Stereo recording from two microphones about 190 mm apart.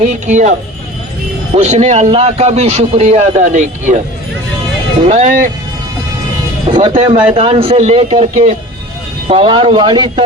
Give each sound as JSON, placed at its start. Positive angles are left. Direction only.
{"t": 0.0, "sound": "a man's voice", "side_deg": -40}
{"t": 1.5, "sound": "a man's voice", "side_deg": -35}
{"t": 5.0, "sound": "a man's voice", "side_deg": -40}
{"t": 6.7, "sound": "a man's voice", "side_deg": -25}